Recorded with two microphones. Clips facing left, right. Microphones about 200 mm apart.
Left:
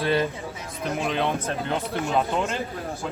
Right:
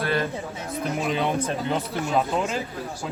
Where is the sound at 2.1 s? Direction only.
Centre (ahead or behind).